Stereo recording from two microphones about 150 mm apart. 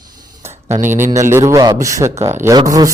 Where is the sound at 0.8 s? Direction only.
15° right (ahead or behind).